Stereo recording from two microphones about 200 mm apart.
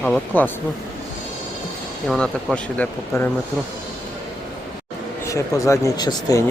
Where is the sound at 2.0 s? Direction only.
Centre (ahead or behind).